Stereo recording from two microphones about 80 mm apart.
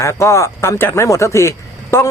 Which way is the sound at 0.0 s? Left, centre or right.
Left.